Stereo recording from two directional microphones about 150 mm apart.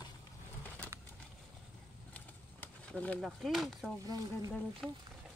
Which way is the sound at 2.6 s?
10° left (ahead or behind).